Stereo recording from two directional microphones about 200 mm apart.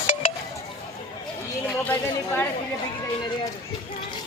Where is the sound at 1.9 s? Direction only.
10° left (ahead or behind).